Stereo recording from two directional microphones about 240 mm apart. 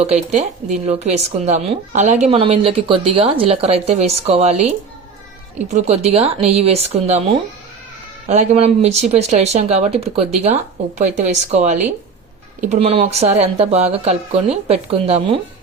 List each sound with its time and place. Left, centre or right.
0.0 s speech: right
5.6 s speech: right